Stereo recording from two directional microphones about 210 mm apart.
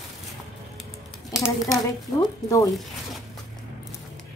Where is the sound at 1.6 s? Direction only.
15° left (ahead or behind).